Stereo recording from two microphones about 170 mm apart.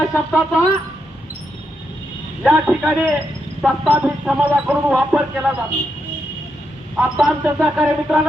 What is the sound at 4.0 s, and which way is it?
Speech, 5° right (ahead or behind).